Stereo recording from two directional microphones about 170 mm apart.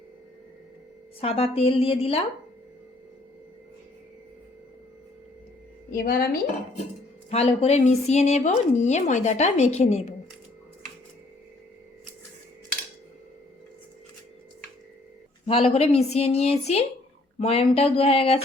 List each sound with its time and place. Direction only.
1.2 s a woman's voice: 35° left (ahead or behind)
5.9 s a woman's voice: 60° left (ahead or behind)
7.3 s a woman's voice: 35° left (ahead or behind)
15.4 s a woman's voice: 35° left (ahead or behind)